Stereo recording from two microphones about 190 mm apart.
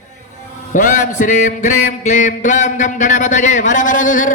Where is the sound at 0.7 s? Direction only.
40° left (ahead or behind).